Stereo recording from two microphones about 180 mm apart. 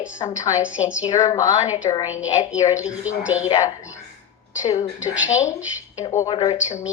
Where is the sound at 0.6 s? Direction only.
5° right (ahead or behind).